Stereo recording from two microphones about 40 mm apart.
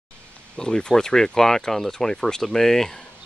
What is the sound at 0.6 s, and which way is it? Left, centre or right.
Speech, centre.